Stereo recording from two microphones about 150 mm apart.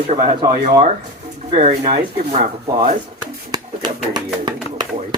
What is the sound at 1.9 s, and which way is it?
Speech, 45° right (ahead or behind).